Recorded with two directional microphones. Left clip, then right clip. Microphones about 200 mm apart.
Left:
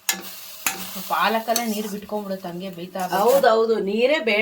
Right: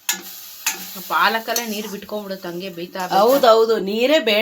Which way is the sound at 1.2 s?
5° right (ahead or behind).